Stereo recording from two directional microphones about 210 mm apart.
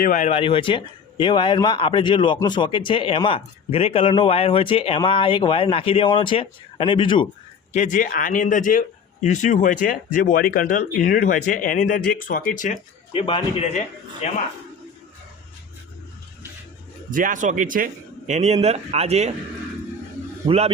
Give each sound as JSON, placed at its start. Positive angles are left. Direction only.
{"t": 0.0, "sound": "a man's voice", "side_deg": 40}
{"t": 7.7, "sound": "speech", "side_deg": 35}
{"t": 13.1, "sound": "a man's voice", "side_deg": 25}
{"t": 17.1, "sound": "a man's voice", "side_deg": -40}
{"t": 20.4, "sound": "a man's voice", "side_deg": -30}